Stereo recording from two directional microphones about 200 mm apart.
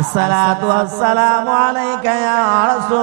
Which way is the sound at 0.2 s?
15° right (ahead or behind).